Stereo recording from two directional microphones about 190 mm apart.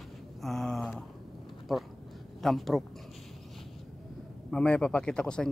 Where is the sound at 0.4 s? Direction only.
Centre (ahead or behind).